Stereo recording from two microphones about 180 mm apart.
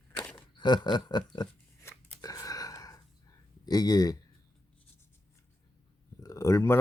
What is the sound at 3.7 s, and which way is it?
Speech, 20° left (ahead or behind).